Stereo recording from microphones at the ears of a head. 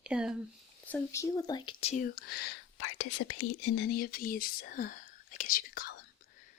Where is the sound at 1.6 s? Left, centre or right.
Left.